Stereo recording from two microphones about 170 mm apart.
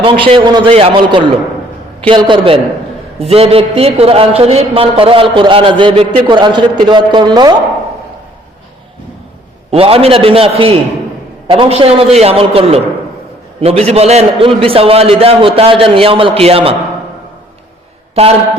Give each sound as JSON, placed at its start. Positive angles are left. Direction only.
{"t": 0.0, "sound": "a man's voice", "side_deg": -30}
{"t": 9.7, "sound": "a man's voice", "side_deg": -35}
{"t": 18.1, "sound": "a man's voice", "side_deg": -35}